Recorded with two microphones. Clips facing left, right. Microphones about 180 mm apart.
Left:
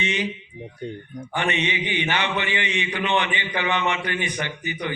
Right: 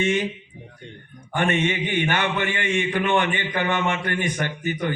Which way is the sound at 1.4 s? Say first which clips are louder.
Right 3 dB; 50° right (ahead or behind).